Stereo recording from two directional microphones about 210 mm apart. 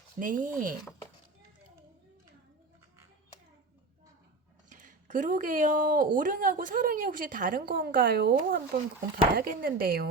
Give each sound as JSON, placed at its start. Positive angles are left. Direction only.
{"t": 0.2, "sound": "a woman's voice", "side_deg": -40}
{"t": 4.7, "sound": "a woman's voice", "side_deg": -35}